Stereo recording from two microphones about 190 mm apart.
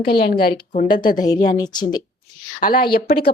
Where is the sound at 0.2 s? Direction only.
55° left (ahead or behind).